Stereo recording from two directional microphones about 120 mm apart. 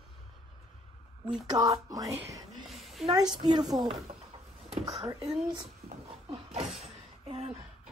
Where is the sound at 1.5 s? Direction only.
30° right (ahead or behind).